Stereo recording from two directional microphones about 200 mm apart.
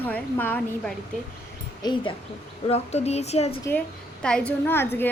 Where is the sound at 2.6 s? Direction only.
30° left (ahead or behind).